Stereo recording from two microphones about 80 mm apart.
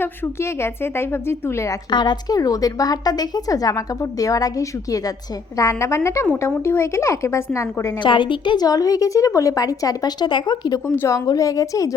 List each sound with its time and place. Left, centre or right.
0.0 s a woman's voice: left
1.9 s a woman's voice: left
8.0 s a woman's voice: left
8.6 s a woman's voice: left
10.8 s a woman's voice: left
11.3 s a woman's voice: left